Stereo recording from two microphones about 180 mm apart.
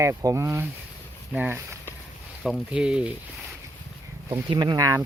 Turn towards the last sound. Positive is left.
turn(degrees=-20)  # may be behind; listen again after turning